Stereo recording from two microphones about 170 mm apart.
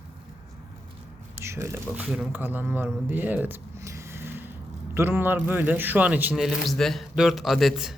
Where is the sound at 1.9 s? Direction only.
5° right (ahead or behind).